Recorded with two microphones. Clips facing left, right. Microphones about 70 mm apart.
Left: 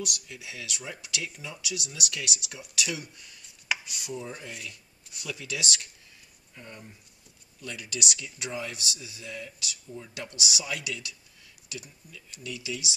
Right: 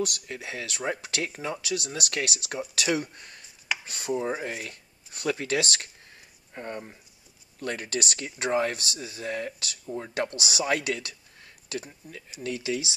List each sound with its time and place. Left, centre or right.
0.0 s speech: right
3.8 s speech: right
4.3 s speech: right